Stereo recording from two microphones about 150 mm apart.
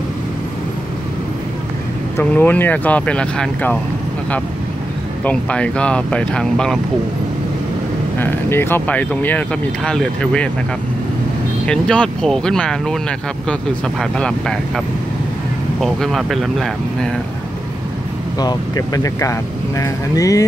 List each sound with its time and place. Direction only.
2.1 s speech: 10° left (ahead or behind)
5.2 s speech: 10° left (ahead or behind)
8.2 s speech: 15° left (ahead or behind)
11.6 s speech: 5° left (ahead or behind)
15.8 s speech: centre (ahead or behind)
18.4 s speech: 25° left (ahead or behind)